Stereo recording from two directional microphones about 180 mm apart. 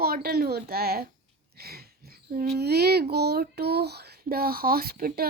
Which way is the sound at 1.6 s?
60° right (ahead or behind).